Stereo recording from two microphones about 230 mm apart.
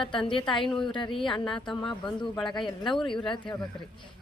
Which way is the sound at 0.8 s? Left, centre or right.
Centre.